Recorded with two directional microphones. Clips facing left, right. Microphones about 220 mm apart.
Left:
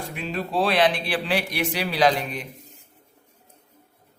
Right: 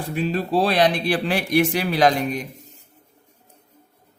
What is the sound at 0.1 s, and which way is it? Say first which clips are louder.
Speech: right 8 dB; 35° right (ahead or behind).